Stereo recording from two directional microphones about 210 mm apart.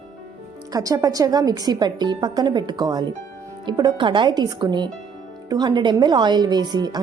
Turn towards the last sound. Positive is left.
turn(degrees=-20)  # may be behind; listen again after turning